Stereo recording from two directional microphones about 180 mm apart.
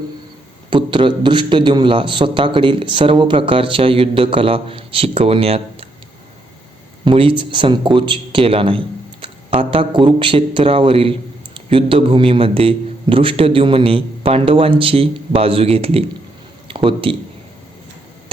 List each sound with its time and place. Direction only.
0.7 s a man's voice: 25° right (ahead or behind)
7.0 s a man's voice: 30° right (ahead or behind)